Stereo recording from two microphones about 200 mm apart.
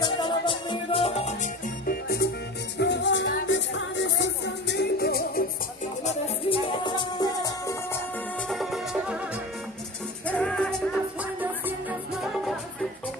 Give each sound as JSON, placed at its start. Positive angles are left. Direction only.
{"t": 0.0, "sound": "music", "side_deg": 25}
{"t": 2.8, "sound": "music", "side_deg": 60}
{"t": 6.8, "sound": "music", "side_deg": 20}
{"t": 8.5, "sound": "music", "side_deg": 0}
{"t": 10.2, "sound": "music", "side_deg": 5}